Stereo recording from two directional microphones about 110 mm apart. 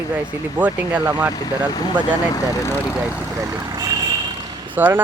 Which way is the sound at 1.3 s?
35° left (ahead or behind).